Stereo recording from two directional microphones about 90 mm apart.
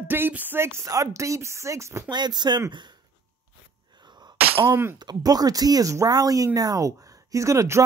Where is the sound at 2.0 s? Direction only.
50° right (ahead or behind).